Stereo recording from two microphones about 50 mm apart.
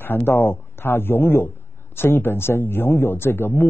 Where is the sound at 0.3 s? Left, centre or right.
Left.